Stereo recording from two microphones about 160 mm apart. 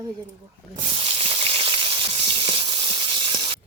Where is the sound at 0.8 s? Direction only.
35° right (ahead or behind).